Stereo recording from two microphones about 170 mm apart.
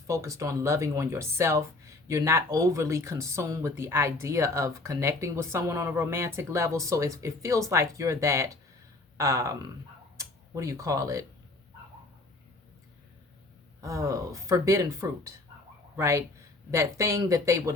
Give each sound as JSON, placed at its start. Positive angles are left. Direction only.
{"t": 0.1, "sound": "speech", "side_deg": -20}
{"t": 13.8, "sound": "speech", "side_deg": -20}